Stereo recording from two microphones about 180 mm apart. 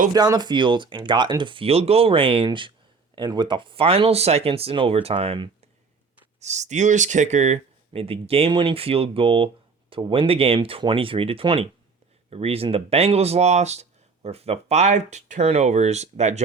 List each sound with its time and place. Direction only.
0.1 s speech: 20° right (ahead or behind); by 16.4 s 40° right (ahead or behind)